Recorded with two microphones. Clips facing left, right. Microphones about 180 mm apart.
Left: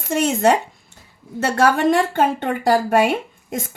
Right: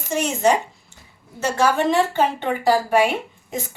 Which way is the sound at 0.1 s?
60° left (ahead or behind).